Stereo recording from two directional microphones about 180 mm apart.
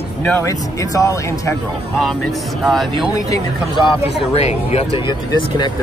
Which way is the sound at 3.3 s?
25° left (ahead or behind).